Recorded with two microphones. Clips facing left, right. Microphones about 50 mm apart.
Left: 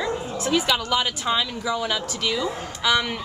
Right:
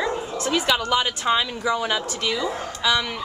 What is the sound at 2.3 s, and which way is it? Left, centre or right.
Speech, centre.